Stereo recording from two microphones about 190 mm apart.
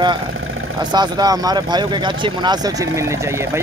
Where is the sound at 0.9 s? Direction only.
20° right (ahead or behind).